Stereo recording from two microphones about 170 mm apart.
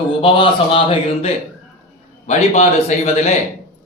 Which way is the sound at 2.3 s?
40° left (ahead or behind).